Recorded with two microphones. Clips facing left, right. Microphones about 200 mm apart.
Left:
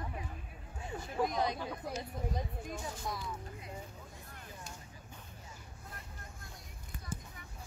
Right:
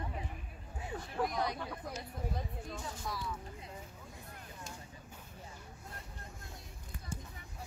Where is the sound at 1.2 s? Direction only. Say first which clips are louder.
Left 2 dB; 20° left (ahead or behind).